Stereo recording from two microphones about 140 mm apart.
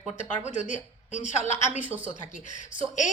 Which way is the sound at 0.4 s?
55° left (ahead or behind).